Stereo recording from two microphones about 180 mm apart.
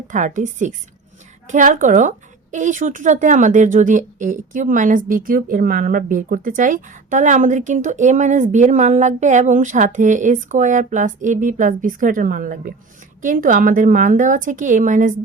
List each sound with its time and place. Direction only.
0.1 s a woman's voice: 45° right (ahead or behind)